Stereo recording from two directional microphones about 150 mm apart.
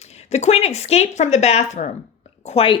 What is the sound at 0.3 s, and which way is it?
Speech, 45° left (ahead or behind).